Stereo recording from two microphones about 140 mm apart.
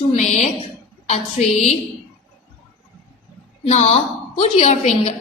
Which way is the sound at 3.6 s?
45° left (ahead or behind).